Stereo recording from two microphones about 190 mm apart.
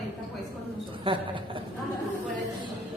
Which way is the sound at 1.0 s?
25° right (ahead or behind).